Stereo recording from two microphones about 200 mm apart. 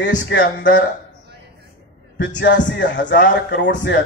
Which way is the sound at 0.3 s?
60° left (ahead or behind).